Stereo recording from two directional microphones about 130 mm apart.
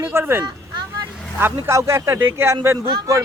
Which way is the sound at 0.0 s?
20° right (ahead or behind).